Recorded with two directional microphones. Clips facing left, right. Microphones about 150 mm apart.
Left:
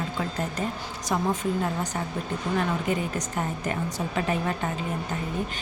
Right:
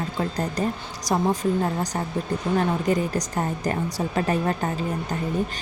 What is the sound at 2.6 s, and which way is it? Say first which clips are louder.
A woman's voice: right 4 dB; 35° right (ahead or behind).